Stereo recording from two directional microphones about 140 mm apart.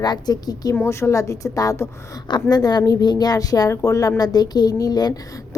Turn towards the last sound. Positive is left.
turn(degrees=30)  # may be behind; listen again after turning